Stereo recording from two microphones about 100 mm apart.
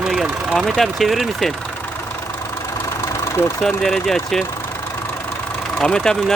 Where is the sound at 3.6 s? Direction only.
5° left (ahead or behind).